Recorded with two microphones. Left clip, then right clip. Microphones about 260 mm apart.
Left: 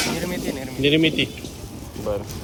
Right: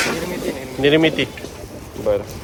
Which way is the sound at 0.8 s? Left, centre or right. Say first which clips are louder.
Right 4 dB; centre.